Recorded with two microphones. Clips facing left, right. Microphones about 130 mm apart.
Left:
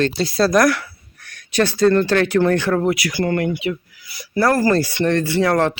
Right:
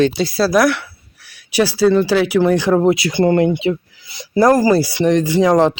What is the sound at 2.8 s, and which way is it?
Speech, 25° right (ahead or behind).